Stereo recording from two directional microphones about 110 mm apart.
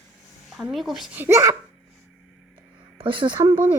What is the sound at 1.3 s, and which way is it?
Speech, 30° right (ahead or behind).